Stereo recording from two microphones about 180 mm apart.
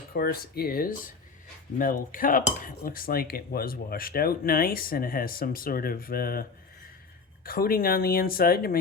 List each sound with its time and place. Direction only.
0.1 s speech: 55° left (ahead or behind)
1.8 s cutlery: 50° left (ahead or behind)
7.4 s speech: 55° left (ahead or behind)